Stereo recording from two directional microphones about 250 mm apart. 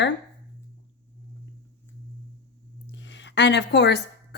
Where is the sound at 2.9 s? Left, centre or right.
Left.